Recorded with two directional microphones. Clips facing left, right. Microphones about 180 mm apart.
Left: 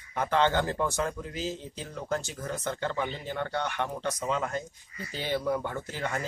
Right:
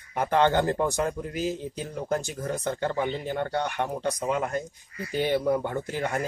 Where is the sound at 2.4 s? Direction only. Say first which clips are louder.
Right 4 dB; 35° right (ahead or behind).